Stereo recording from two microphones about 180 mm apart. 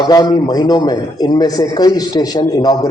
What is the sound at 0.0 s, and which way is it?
A man's voice, 20° left (ahead or behind).